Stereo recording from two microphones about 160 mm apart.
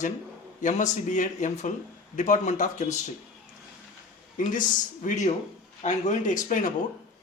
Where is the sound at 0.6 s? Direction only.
50° left (ahead or behind).